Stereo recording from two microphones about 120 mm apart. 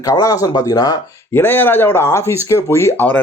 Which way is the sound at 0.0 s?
30° left (ahead or behind).